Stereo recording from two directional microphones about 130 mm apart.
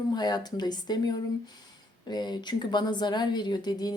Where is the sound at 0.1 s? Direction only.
35° left (ahead or behind).